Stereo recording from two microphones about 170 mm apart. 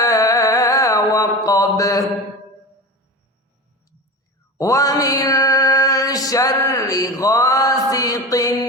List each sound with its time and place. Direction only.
0.0 s mantra: 20° left (ahead or behind)
4.5 s mantra: 20° left (ahead or behind)